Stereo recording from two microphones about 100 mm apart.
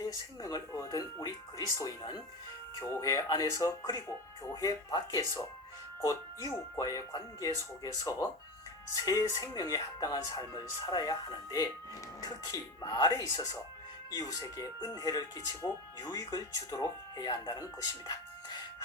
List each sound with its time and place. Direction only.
0.0 s speech: 40° left (ahead or behind)